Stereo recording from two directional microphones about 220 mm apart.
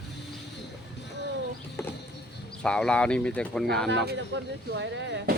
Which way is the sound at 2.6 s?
5° left (ahead or behind).